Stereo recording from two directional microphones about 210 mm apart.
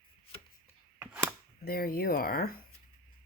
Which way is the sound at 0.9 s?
10° right (ahead or behind).